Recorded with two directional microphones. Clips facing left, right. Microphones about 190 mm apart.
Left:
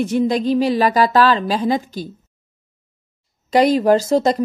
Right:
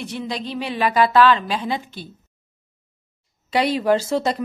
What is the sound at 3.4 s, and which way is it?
Speech, 40° left (ahead or behind).